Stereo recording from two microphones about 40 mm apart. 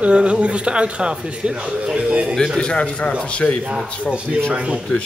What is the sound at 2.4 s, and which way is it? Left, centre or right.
Speech, left.